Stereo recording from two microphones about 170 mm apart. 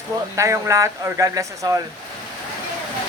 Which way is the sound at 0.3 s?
20° right (ahead or behind).